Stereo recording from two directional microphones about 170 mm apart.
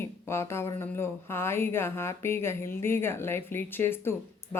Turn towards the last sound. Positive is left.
turn(degrees=15)  # may be behind; listen again after turning